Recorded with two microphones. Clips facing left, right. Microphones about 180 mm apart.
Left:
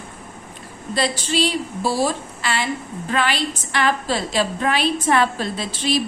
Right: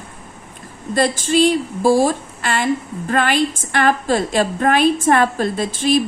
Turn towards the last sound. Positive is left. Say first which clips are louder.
# right 5 dB
turn(degrees=-50)  # may be behind; listen again after turning